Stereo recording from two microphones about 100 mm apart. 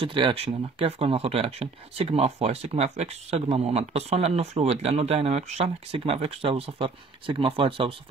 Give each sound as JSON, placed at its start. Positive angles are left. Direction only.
{"t": 0.0, "sound": "speech", "side_deg": -55}